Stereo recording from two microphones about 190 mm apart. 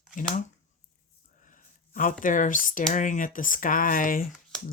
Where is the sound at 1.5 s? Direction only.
45° left (ahead or behind).